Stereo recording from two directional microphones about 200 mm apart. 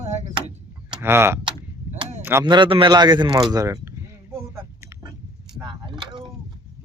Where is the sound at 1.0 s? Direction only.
10° right (ahead or behind).